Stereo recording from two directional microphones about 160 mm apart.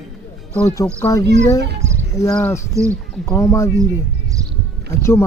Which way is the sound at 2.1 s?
20° left (ahead or behind).